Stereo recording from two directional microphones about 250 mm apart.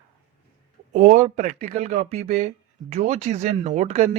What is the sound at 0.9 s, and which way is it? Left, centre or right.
Speech, right.